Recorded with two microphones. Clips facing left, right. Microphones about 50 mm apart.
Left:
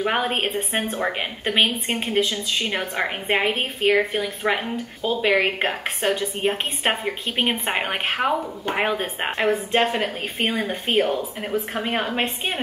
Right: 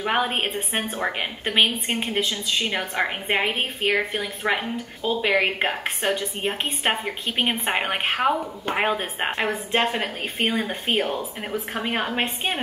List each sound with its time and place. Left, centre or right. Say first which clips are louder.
0.0 s a woman's voice: left 1 dB; centre